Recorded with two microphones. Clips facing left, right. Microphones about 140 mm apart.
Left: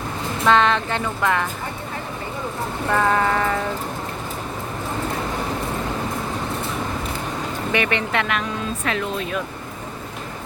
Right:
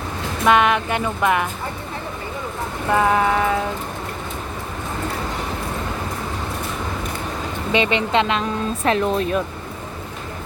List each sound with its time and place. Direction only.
0.4 s speech: 15° right (ahead or behind)
2.9 s speech: 15° right (ahead or behind)
7.7 s speech: 20° right (ahead or behind); by 9.4 s 35° right (ahead or behind)